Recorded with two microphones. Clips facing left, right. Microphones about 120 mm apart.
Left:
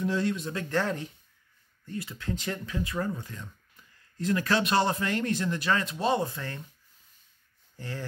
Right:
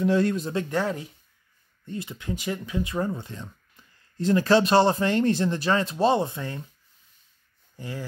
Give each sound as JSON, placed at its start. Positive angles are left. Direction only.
{"t": 0.0, "sound": "speech", "side_deg": -65}
{"t": 0.7, "sound": "speech", "side_deg": -10}
{"t": 1.9, "sound": "speech", "side_deg": -20}
{"t": 7.7, "sound": "speech", "side_deg": -15}